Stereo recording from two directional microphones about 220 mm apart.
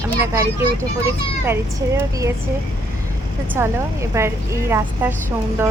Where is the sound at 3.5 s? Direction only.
10° right (ahead or behind).